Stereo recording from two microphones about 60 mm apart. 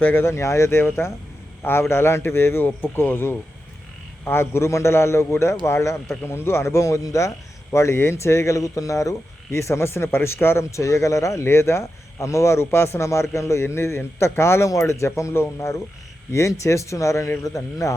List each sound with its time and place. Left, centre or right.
0.0 s a man's voice: left